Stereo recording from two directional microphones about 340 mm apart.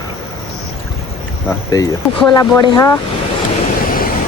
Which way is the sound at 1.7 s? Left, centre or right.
Centre.